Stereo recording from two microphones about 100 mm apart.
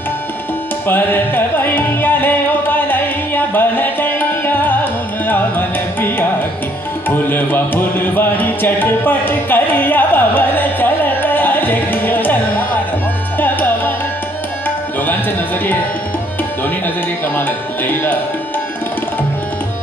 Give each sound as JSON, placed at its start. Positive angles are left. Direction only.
{"t": 0.8, "sound": "music", "side_deg": 20}
{"t": 5.2, "sound": "carnatic music", "side_deg": 20}
{"t": 7.1, "sound": "music", "side_deg": 20}
{"t": 17.4, "sound": "music", "side_deg": 20}